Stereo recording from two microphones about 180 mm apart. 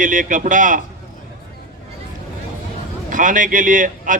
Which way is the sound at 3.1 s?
45° right (ahead or behind).